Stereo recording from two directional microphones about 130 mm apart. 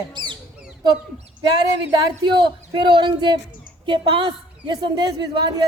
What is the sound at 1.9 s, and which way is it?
A woman's voice, 35° right (ahead or behind).